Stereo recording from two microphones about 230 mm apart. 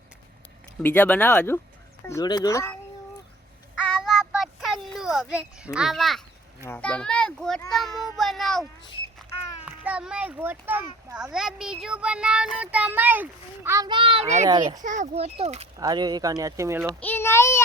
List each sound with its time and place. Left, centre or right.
0.8 s speech: centre
4.0 s a sound: centre
5.7 s a child's voice: centre
9.6 s a child's voice: centre; by 14.4 s right
14.4 s speech: centre
14.8 s speech: right; by 16.8 s centre
16.8 s speech: centre